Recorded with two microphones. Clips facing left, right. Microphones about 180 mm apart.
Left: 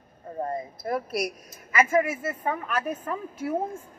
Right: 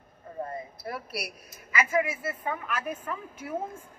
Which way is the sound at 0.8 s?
45° left (ahead or behind).